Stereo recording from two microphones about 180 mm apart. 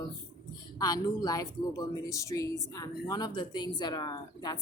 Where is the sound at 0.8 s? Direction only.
20° left (ahead or behind).